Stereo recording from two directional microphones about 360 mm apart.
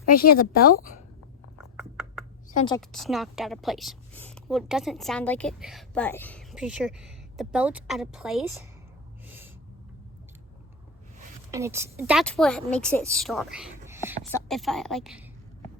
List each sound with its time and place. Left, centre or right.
0.1 s speech: left
2.5 s a woman's voice: centre
2.9 s a woman's voice: centre
9.2 s gasp: centre
11.5 s a woman's voice: centre